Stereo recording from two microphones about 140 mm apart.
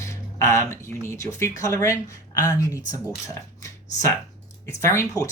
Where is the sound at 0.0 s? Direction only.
20° left (ahead or behind).